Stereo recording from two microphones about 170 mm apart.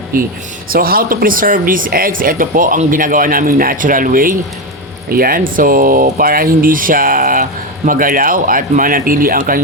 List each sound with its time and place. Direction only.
0.1 s speech: 55° right (ahead or behind)